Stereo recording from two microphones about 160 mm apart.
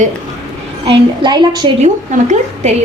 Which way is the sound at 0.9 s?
25° right (ahead or behind).